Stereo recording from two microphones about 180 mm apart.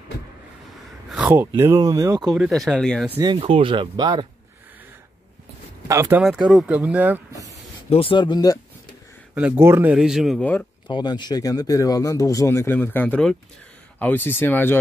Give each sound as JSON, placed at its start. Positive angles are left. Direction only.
{"t": 1.1, "sound": "a sound", "side_deg": -5}
{"t": 1.5, "sound": "speech", "side_deg": -20}
{"t": 2.3, "sound": "speech", "side_deg": 0}
{"t": 3.2, "sound": "speech", "side_deg": -25}
{"t": 5.9, "sound": "speech", "side_deg": -15}
{"t": 6.2, "sound": "speech", "side_deg": -5}
{"t": 7.9, "sound": "speech", "side_deg": 30}
{"t": 9.3, "sound": "speech", "side_deg": -10}
{"t": 10.4, "sound": "speech", "side_deg": 10}
{"t": 10.9, "sound": "speech", "side_deg": 25}